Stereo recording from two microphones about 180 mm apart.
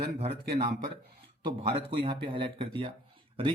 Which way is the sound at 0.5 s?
40° right (ahead or behind).